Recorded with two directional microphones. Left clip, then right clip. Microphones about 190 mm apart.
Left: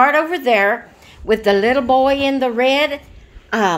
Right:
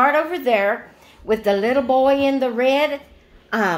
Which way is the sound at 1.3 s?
40° left (ahead or behind).